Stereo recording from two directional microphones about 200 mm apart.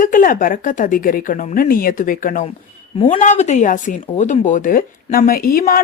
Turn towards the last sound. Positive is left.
turn(degrees=45)  # may be behind; listen again after turning